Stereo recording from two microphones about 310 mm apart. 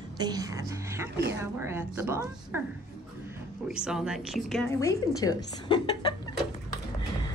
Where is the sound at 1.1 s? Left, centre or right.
Right.